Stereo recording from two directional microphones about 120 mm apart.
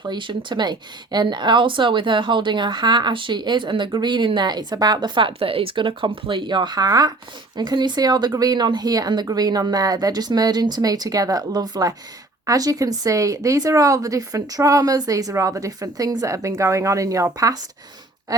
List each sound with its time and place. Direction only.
0.0 s a woman's voice: 40° right (ahead or behind)